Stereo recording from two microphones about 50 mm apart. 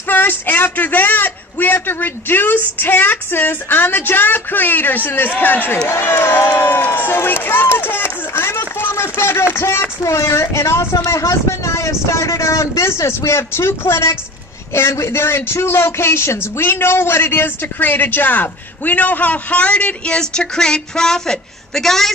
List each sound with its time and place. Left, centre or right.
0.1 s a man's voice: left
5.9 s speech: left
6.6 s run: left
9.5 s speech: left
10.0 s speech: left
11.1 s speech: left; by 22.1 s centre